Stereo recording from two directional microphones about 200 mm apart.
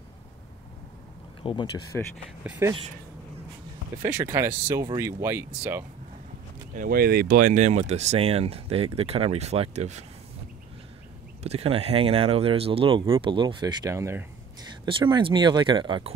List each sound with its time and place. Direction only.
1.4 s speech: 25° left (ahead or behind)
2.4 s speech: 5° right (ahead or behind)
4.0 s speech: 10° right (ahead or behind)
6.7 s speech: 45° right (ahead or behind)
11.4 s speech: 30° right (ahead or behind)